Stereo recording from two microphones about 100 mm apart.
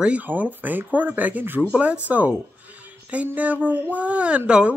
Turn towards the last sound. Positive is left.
turn(degrees=-10)  # may be behind; listen again after turning